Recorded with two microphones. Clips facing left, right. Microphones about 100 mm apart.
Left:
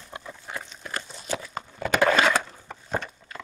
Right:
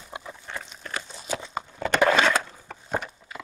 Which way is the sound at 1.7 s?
5° left (ahead or behind).